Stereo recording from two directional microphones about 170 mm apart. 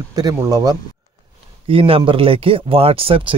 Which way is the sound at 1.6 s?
35° right (ahead or behind).